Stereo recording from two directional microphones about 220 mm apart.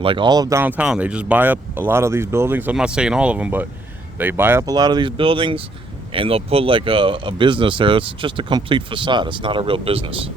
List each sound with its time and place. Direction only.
0.0 s speech: 20° right (ahead or behind)